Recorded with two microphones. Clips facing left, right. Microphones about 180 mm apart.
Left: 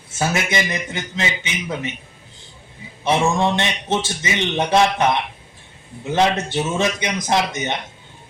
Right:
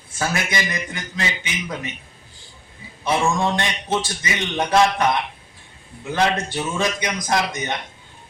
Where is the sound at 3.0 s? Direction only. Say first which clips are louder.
Left 2 dB; 25° left (ahead or behind).